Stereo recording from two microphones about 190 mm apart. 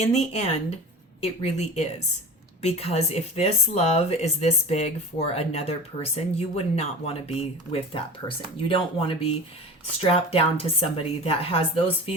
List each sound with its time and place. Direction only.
0.0 s speech: 35° left (ahead or behind)